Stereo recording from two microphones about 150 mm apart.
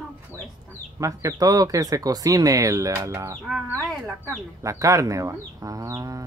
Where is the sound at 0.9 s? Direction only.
20° right (ahead or behind).